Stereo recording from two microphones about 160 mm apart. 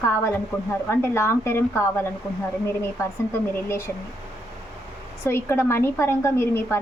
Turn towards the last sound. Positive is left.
turn(degrees=15)  # may be behind; listen again after turning